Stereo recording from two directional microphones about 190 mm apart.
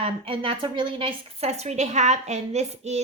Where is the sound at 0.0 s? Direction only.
30° right (ahead or behind).